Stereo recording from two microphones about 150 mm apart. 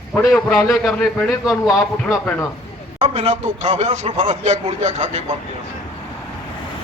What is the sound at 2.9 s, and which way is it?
Speech, 45° right (ahead or behind).